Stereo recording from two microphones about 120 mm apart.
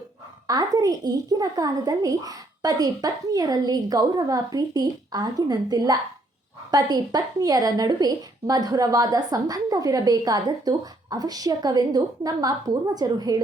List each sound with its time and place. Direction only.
0.4 s a woman's voice: 30° right (ahead or behind)